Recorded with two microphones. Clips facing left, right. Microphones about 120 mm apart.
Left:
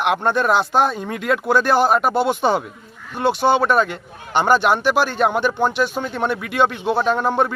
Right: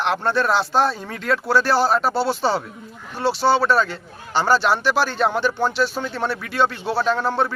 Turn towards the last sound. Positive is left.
turn(degrees=15)  # may be behind; listen again after turning